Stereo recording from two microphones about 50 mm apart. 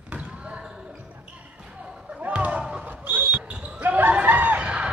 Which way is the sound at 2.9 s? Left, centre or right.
Right.